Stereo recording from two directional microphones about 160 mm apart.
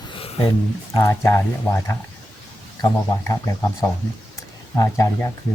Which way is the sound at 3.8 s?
20° left (ahead or behind).